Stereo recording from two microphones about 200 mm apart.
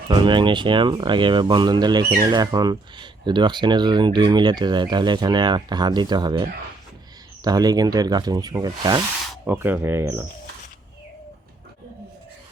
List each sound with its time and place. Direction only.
0.1 s speech: 25° right (ahead or behind)
9.4 s speech: 10° right (ahead or behind)